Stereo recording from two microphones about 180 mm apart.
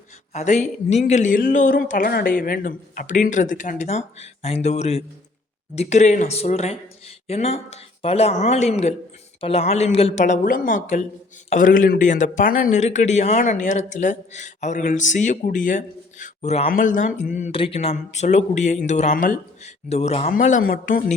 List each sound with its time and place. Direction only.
0.3 s speech: 40° left (ahead or behind)
20.3 s speech: 45° left (ahead or behind)